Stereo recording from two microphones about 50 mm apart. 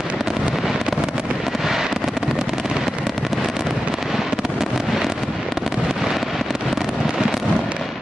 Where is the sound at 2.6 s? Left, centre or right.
Centre.